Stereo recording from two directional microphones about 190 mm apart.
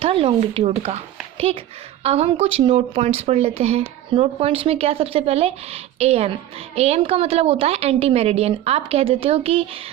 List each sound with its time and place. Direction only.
0.0 s speech: 30° right (ahead or behind)